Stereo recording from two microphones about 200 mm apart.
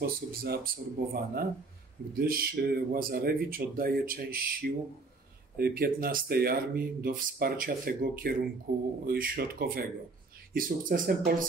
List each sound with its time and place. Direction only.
0.0 s speech: 45° right (ahead or behind)